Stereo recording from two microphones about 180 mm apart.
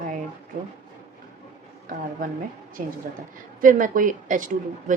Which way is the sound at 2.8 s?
45° right (ahead or behind).